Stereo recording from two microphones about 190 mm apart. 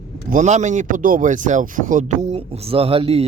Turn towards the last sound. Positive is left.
turn(degrees=-30)  # may be behind; listen again after turning